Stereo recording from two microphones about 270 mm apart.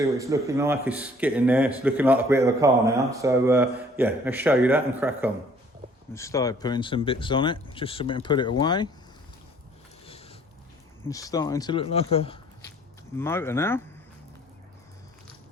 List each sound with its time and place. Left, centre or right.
0.0 s speech: centre
6.1 s speech: centre
11.1 s speech: centre
13.1 s speech: centre